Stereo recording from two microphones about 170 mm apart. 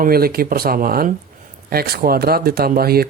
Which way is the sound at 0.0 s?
60° right (ahead or behind).